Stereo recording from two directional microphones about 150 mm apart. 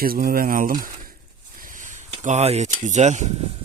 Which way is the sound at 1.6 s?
60° right (ahead or behind).